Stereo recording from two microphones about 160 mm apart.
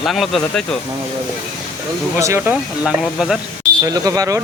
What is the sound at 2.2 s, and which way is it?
Speech, 20° right (ahead or behind).